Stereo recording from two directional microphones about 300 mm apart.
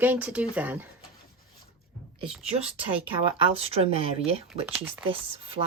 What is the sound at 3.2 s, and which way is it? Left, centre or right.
Speech, centre.